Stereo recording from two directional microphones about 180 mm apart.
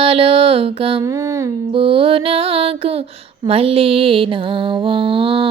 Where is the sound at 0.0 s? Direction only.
30° right (ahead or behind).